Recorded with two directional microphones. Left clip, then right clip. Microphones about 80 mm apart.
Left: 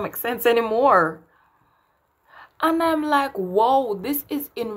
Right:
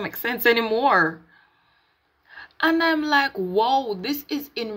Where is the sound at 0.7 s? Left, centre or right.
Centre.